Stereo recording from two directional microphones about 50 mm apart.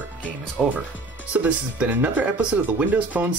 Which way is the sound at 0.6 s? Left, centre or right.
Centre.